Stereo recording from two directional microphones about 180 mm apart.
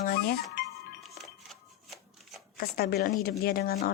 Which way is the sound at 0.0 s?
55° left (ahead or behind).